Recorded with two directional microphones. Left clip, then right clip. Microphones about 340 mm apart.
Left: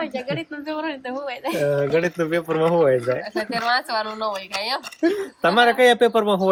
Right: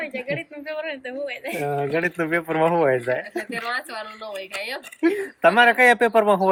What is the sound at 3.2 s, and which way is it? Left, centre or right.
A woman's voice, centre.